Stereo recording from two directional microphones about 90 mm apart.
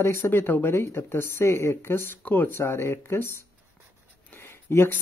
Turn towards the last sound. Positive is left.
turn(degrees=30)  # may be behind; listen again after turning